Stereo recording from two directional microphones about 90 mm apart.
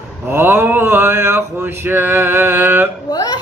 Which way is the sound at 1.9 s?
25° right (ahead or behind).